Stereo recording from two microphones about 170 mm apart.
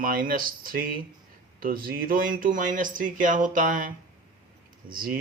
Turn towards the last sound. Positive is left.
turn(degrees=-55)  # may be behind; listen again after turning